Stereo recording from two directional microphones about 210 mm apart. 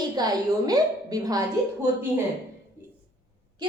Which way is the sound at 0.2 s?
20° right (ahead or behind).